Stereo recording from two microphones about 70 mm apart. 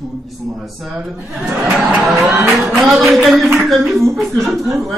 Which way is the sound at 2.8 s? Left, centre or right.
Centre.